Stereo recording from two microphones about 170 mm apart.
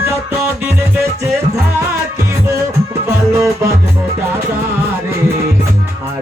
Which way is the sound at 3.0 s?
15° right (ahead or behind).